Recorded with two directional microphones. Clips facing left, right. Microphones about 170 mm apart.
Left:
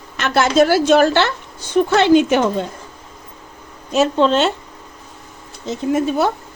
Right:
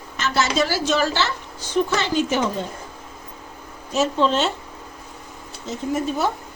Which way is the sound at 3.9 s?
65° left (ahead or behind).